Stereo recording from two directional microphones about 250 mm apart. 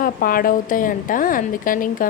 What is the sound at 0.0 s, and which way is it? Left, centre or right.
A woman's voice, left.